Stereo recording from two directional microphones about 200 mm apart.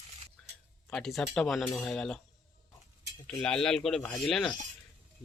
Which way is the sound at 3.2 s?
5° left (ahead or behind).